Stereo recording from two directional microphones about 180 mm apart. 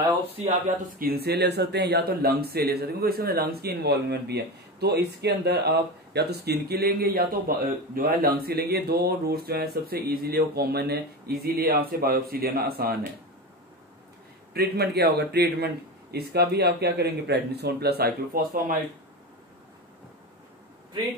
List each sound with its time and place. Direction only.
0.9 s speech: 55° right (ahead or behind)
14.5 s speech: 60° right (ahead or behind)